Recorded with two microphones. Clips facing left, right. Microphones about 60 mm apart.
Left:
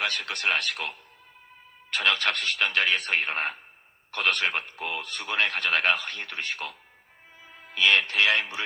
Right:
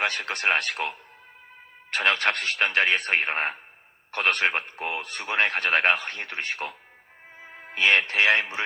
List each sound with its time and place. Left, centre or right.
0.0 s speech: right
1.9 s speech: right
7.3 s music: right
8.0 s speech: right